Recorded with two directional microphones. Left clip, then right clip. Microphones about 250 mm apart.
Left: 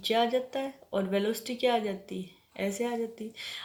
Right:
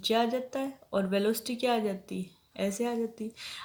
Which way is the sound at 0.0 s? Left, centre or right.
Right.